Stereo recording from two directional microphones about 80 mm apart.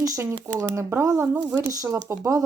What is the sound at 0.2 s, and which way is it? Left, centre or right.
Speech, right.